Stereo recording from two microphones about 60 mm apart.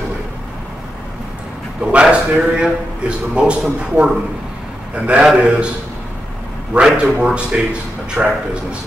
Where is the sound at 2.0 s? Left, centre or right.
Centre.